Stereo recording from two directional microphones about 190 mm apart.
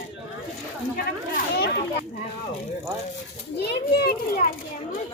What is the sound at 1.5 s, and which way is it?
Children playing, 60° left (ahead or behind).